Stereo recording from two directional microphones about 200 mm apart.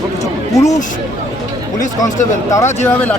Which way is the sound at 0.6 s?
35° left (ahead or behind).